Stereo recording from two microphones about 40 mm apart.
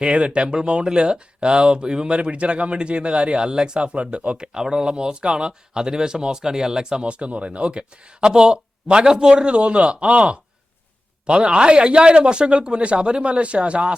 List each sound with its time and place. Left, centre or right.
0.0 s speech: right
4.4 s speech: centre
9.3 s speech: right